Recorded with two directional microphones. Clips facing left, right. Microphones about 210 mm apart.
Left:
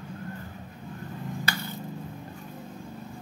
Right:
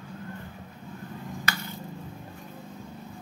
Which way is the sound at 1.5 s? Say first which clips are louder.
Right 1 dB; 30° left (ahead or behind).